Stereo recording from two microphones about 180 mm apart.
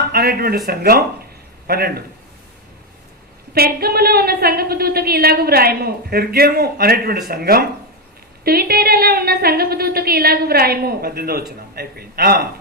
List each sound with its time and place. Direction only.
0.1 s a woman's voice: 55° right (ahead or behind)
3.5 s a woman's voice: 60° right (ahead or behind)